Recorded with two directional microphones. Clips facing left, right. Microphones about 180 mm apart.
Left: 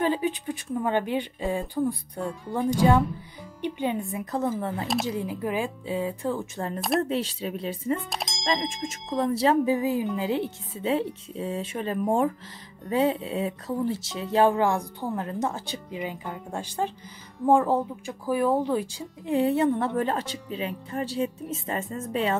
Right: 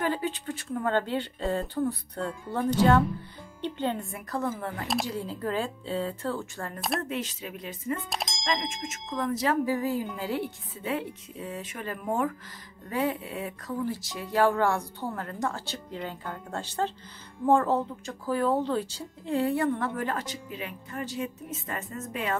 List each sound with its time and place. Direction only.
0.0 s speech: 20° left (ahead or behind)
7.0 s speech: 30° left (ahead or behind)
8.1 s speech: centre (ahead or behind)
8.6 s a woman's voice: 35° left (ahead or behind)
9.8 s a woman's voice: 15° left (ahead or behind)